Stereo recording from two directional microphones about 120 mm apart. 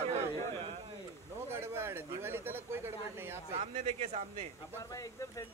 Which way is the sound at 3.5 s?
60° right (ahead or behind).